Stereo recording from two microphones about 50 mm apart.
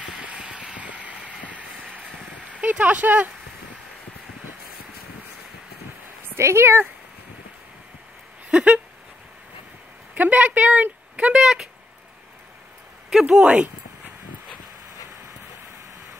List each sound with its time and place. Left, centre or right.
0.2 s vehicle: right
0.7 s vehicle: right
2.6 s speech: right
6.3 s speech: right
8.5 s a sound: centre
10.1 s speech: right
11.3 s speech: centre
13.1 s speech: centre